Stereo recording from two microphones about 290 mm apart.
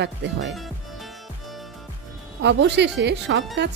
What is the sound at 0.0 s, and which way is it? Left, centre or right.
Speech, right.